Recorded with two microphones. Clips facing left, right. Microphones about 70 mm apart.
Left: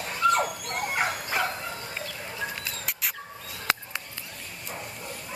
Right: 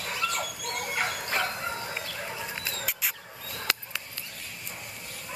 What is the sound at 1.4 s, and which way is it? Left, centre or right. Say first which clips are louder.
Bow-wow: left 2 dB; centre.